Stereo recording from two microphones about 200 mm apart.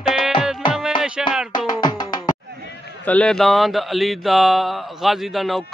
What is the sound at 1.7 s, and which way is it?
Music, 20° left (ahead or behind).